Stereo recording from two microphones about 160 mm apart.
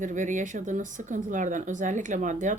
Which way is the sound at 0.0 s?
50° right (ahead or behind).